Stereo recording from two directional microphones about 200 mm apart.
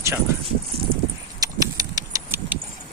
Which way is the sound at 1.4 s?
20° right (ahead or behind).